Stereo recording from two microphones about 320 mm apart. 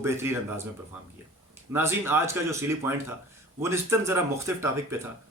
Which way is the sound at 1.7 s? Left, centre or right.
Centre.